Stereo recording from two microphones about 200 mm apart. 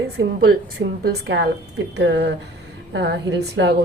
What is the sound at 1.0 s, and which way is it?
A woman's voice, 60° right (ahead or behind).